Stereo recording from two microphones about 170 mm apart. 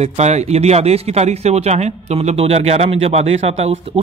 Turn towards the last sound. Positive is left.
turn(degrees=-35)  # may be behind; listen again after turning